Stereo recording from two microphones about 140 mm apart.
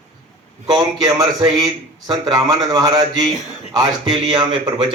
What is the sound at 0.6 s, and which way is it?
A man's voice, 30° right (ahead or behind).